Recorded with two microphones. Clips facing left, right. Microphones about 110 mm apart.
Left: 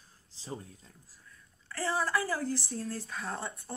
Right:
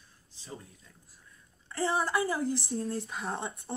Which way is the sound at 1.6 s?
20° right (ahead or behind).